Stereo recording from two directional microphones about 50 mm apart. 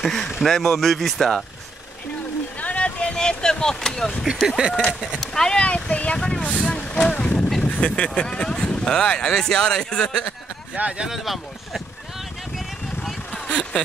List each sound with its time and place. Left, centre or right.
0.0 s speech: centre
2.6 s vehicle: left
4.6 s speech: centre
5.2 s speech: centre
5.6 s speech: left
6.4 s vehicle: left
8.1 s speech: left
10.8 s speech: right
11.1 s speech: centre
13.3 s a sound: left